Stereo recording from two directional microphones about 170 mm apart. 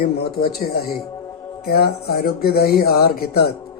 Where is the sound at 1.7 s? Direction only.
65° left (ahead or behind).